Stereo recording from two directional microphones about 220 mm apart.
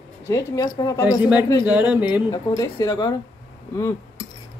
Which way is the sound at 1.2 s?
10° right (ahead or behind).